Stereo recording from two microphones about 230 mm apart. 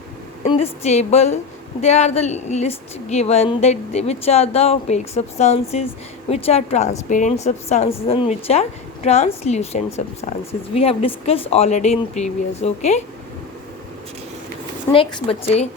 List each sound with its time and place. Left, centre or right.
0.4 s a woman's voice: left
14.9 s a woman's voice: left